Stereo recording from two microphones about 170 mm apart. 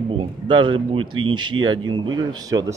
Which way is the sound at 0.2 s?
30° right (ahead or behind).